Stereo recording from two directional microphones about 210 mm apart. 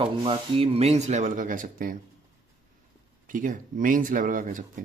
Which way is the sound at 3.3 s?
40° right (ahead or behind).